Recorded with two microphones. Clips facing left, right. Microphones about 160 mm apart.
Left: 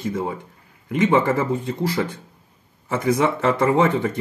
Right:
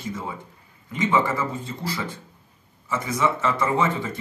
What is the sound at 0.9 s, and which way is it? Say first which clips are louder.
Speech: left 6 dB; 55° left (ahead or behind).